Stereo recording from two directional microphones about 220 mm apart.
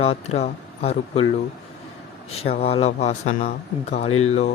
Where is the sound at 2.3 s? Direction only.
30° left (ahead or behind).